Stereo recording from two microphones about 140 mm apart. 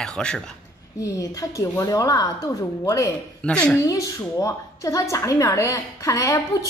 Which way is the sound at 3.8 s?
25° left (ahead or behind).